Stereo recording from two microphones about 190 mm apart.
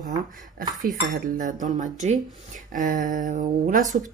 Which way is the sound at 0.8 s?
45° right (ahead or behind).